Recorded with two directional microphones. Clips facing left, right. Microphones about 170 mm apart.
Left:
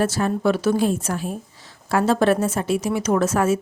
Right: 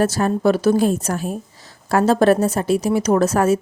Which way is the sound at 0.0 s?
40° right (ahead or behind).